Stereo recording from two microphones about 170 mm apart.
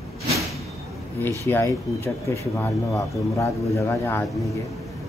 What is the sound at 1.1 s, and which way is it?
Speech, 15° left (ahead or behind).